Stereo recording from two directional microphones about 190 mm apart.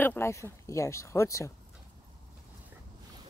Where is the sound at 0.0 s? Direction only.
10° left (ahead or behind).